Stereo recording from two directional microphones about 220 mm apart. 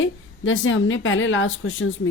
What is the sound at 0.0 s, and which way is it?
Speech, 60° left (ahead or behind).